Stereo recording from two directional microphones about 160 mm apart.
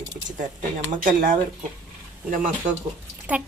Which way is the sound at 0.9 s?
55° right (ahead or behind).